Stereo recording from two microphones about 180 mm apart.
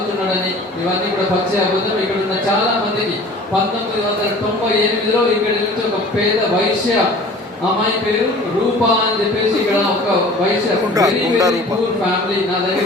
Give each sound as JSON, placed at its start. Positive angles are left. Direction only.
{"t": 10.9, "sound": "speech", "side_deg": -20}